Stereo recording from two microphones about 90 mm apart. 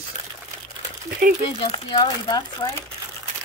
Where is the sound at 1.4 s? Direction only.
80° left.